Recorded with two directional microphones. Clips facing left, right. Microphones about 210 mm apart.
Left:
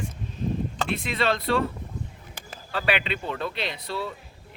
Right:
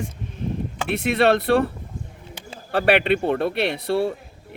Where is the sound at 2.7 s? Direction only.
60° right (ahead or behind).